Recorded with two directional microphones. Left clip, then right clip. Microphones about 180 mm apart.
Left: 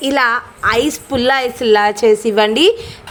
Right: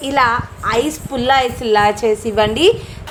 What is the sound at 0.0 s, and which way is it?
A woman's voice, 25° left (ahead or behind).